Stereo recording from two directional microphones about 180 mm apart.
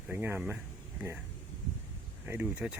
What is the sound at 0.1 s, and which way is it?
Speech, 10° right (ahead or behind).